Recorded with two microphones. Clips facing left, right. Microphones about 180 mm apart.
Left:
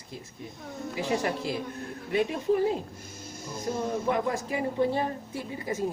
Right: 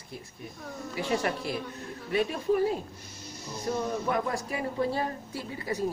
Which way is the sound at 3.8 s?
25° left (ahead or behind).